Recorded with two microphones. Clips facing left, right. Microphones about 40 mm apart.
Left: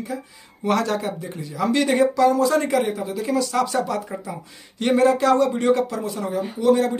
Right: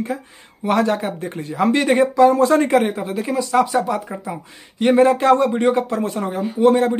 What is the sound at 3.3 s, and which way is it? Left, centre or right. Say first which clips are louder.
Speech: right 4 dB; right.